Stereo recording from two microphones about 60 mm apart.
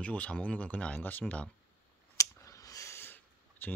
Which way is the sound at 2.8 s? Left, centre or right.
Left.